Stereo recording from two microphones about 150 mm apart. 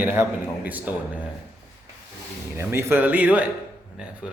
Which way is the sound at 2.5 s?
15° right (ahead or behind).